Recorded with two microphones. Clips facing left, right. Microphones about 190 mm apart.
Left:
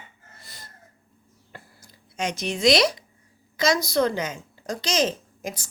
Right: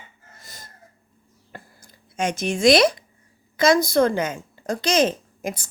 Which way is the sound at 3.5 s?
50° right (ahead or behind).